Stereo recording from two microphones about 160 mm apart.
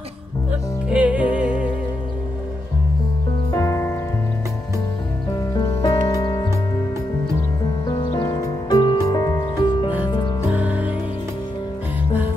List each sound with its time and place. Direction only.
0.8 s music: 10° right (ahead or behind)
3.5 s music: 20° left (ahead or behind)
5.6 s music: 25° left (ahead or behind)
7.8 s music: 30° left (ahead or behind)
10.5 s music: 10° right (ahead or behind)